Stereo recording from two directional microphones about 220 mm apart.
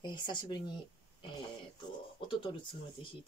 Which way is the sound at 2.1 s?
20° left (ahead or behind).